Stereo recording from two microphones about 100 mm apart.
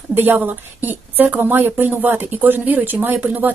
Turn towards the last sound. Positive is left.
turn(degrees=-15)  # may be behind; listen again after turning